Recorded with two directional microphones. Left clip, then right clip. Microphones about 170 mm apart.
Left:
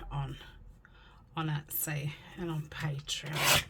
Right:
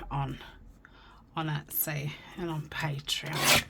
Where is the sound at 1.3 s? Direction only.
15° right (ahead or behind).